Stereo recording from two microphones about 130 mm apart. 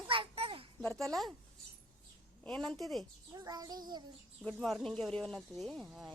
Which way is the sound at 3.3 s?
30° right (ahead or behind).